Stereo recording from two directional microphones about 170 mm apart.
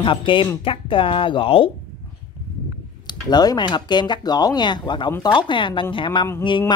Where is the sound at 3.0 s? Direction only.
25° left (ahead or behind).